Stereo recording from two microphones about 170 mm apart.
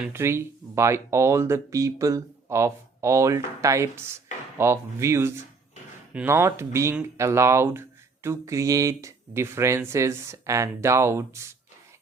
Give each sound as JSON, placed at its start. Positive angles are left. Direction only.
{"t": 0.0, "sound": "speech", "side_deg": -15}